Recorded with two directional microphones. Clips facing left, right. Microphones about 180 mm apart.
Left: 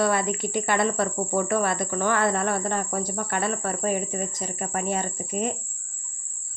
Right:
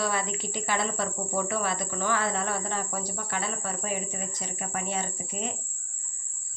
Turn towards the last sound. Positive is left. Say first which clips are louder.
# left 7 dB
turn(degrees=50)  # may be behind; listen again after turning